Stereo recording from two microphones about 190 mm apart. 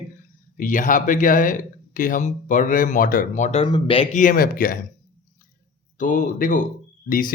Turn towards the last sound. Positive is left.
turn(degrees=50)  # may be behind; listen again after turning